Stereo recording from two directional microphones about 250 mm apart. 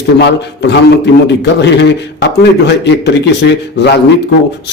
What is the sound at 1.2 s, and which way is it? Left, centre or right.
A man's voice, left.